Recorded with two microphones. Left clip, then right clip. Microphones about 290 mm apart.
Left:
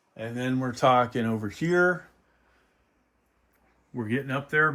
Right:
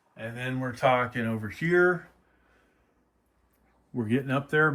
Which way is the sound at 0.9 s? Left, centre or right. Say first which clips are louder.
Left 3 dB; centre.